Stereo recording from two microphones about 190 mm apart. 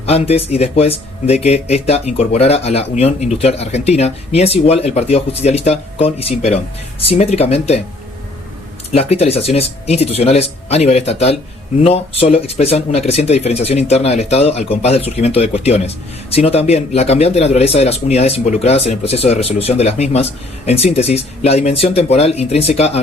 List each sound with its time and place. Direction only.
0.0 s speech: 30° left (ahead or behind)
8.9 s speech: 35° left (ahead or behind)